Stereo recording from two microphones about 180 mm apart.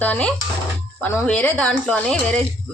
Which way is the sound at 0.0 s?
5° left (ahead or behind).